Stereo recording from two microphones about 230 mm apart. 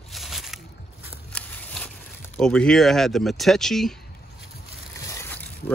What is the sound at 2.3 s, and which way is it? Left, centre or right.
Speech, centre.